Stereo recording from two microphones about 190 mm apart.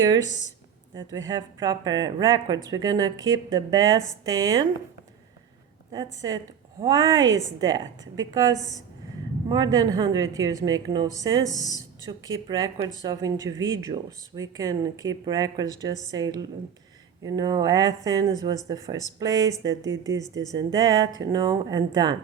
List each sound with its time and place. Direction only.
0.3 s speech: 40° left (ahead or behind)
0.9 s a woman's voice: 20° right (ahead or behind)
5.9 s a woman's voice: 20° right (ahead or behind)